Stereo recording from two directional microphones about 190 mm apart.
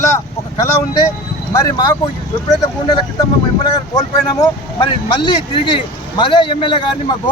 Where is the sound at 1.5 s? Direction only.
20° left (ahead or behind).